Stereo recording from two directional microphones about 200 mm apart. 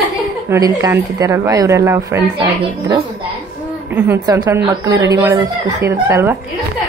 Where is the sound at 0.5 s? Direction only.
20° right (ahead or behind).